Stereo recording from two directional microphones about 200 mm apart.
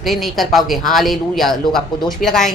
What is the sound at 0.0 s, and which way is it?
A woman's voice, centre (ahead or behind).